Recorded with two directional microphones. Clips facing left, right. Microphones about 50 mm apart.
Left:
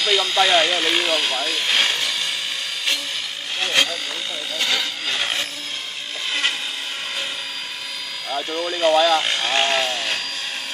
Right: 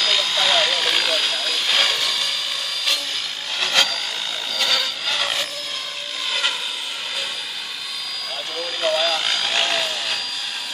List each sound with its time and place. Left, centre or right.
0.0 s vehicle: centre
3.6 s vehicle: left
4.6 s blender: left
8.8 s helicopter: left